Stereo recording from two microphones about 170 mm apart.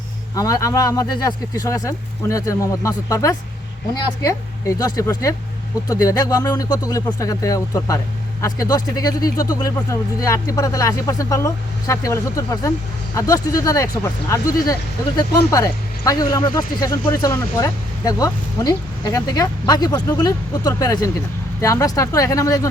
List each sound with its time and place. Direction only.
0.3 s speech: 20° left (ahead or behind)